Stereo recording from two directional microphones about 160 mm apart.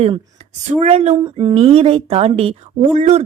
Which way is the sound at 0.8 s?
45° right (ahead or behind).